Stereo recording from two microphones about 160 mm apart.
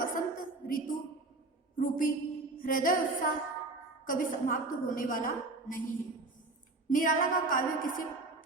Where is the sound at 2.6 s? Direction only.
60° left (ahead or behind).